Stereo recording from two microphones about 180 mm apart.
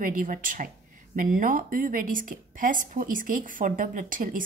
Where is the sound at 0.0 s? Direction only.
50° right (ahead or behind).